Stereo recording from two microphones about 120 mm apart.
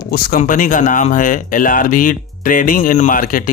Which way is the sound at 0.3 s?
90° left.